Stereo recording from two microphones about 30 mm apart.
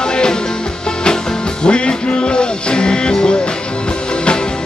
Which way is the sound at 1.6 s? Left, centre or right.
Left.